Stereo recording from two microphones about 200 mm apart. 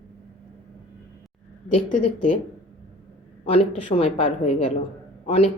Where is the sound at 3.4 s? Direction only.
30° left (ahead or behind).